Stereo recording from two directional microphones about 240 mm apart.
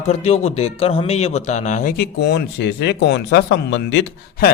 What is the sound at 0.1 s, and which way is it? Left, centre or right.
A man's voice, left.